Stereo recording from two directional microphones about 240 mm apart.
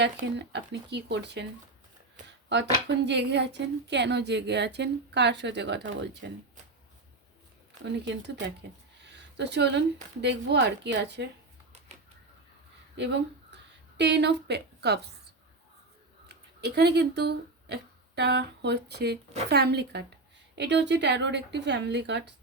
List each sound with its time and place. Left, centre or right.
0.0 s a woman's voice: right
3.0 s a woman's voice: right
7.9 s a woman's voice: right
13.0 s speech: right
16.2 s a woman's voice: right